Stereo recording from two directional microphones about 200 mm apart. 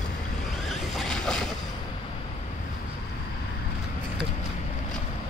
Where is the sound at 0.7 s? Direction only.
Centre (ahead or behind).